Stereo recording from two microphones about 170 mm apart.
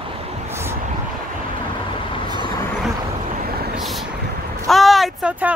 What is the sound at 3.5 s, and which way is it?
Vehicle, 65° right (ahead or behind).